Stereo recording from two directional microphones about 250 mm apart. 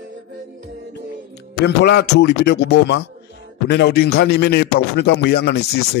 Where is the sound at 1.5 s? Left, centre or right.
Left.